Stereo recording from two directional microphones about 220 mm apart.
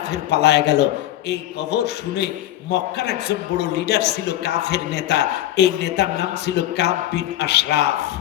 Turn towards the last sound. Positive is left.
turn(degrees=50)  # may be behind; listen again after turning